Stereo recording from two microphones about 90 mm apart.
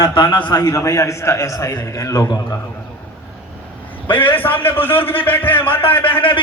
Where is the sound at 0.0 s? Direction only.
55° left (ahead or behind).